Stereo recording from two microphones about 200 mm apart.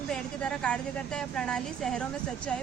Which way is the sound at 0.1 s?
5° left (ahead or behind).